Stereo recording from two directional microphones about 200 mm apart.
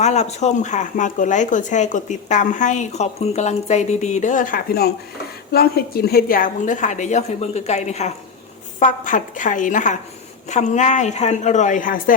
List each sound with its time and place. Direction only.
0.0 s speech: 35° left (ahead or behind)